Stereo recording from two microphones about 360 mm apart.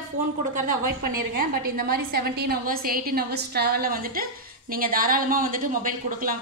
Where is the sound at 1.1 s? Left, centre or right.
Right.